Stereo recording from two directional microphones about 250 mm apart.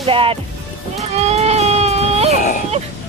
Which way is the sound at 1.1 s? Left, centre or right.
Right.